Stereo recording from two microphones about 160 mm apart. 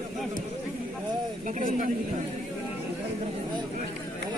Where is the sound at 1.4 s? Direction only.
50° right (ahead or behind).